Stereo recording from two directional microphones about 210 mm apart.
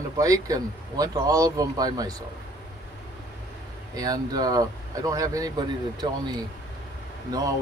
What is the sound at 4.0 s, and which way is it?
Speech, 15° right (ahead or behind).